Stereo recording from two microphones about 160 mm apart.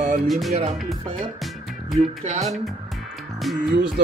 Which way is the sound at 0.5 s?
40° right (ahead or behind).